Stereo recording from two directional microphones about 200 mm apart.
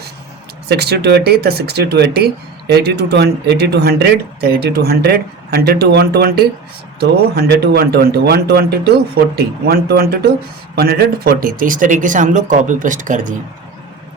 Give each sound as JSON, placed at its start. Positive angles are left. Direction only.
{"t": 0.7, "sound": "speech", "side_deg": -55}